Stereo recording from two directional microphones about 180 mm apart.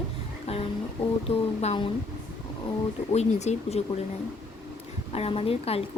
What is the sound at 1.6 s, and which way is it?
Speech, 35° left (ahead or behind).